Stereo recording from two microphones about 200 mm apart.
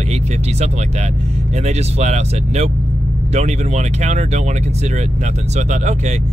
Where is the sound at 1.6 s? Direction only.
35° right (ahead or behind).